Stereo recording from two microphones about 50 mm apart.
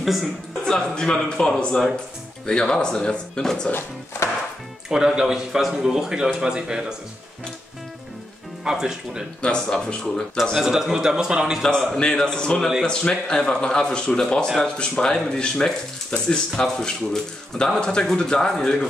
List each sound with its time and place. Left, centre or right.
0.0 s speech: centre
0.7 s speech: centre
4.8 s speech: centre
8.6 s speech: centre
9.4 s speech: centre
10.5 s speech: centre
11.9 s speech: centre